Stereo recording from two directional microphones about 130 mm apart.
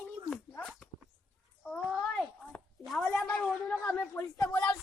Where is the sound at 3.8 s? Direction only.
15° left (ahead or behind).